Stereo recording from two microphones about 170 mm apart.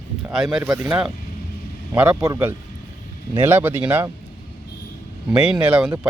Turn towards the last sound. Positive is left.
turn(degrees=-10)  # may be behind; listen again after turning